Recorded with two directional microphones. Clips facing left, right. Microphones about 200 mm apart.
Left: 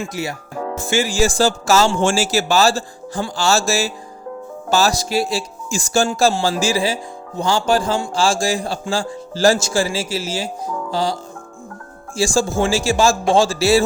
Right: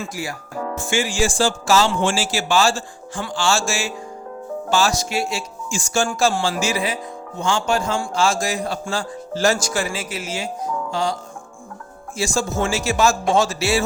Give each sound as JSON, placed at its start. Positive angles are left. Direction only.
{"t": 0.0, "sound": "speech", "side_deg": 20}
{"t": 0.8, "sound": "speech", "side_deg": 35}